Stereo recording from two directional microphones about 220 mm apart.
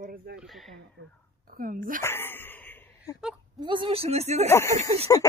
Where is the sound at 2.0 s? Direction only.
10° left (ahead or behind).